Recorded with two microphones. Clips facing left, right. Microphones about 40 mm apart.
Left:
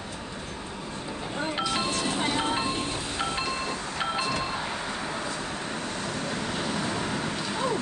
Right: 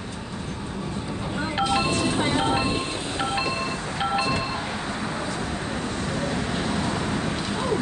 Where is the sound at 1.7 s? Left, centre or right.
Centre.